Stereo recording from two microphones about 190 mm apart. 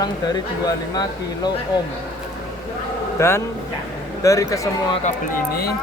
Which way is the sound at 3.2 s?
15° left (ahead or behind).